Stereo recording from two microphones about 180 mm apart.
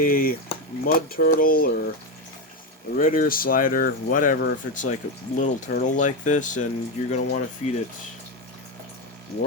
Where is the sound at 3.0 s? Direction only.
50° left (ahead or behind).